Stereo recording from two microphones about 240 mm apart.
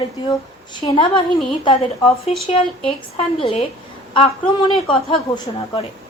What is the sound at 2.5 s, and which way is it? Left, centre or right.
A woman's voice, left.